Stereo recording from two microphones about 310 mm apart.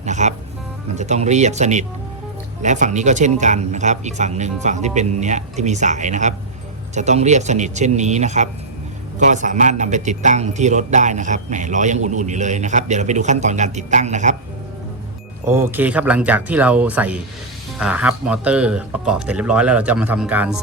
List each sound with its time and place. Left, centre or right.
0.0 s music: right
0.9 s speech: right
15.4 s speech: centre